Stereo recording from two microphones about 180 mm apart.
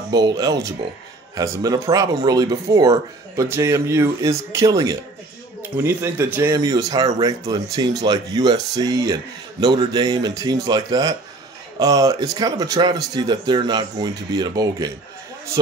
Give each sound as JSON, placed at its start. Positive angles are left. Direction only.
{"t": 0.1, "sound": "speech", "side_deg": -20}